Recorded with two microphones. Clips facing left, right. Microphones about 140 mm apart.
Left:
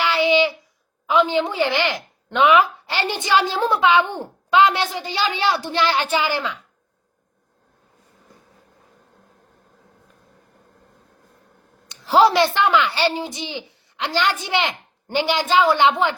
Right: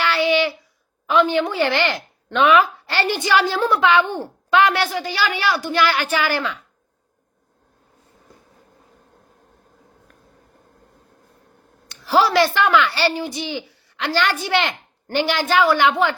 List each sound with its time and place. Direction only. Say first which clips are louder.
0.0 s a sound: left 1 dB; 20° left (ahead or behind)
1.0 s a woman's voice: right 1 dB; 15° left (ahead or behind)
11.9 s a woman's voice: left 2 dB; 20° left (ahead or behind)